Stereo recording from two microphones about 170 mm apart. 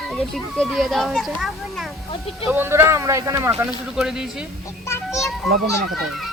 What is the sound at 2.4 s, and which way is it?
Speech, 10° right (ahead or behind).